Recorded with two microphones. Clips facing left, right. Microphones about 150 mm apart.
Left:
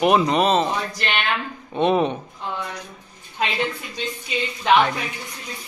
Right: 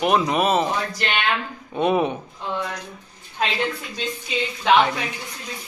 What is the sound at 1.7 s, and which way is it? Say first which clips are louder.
Speech: left 1 dB; 5° right (ahead or behind).